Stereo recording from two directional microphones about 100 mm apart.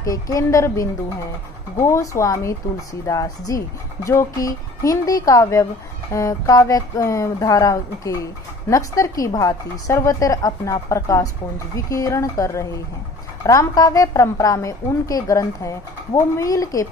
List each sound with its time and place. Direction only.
0.0 s speech: 35° left (ahead or behind)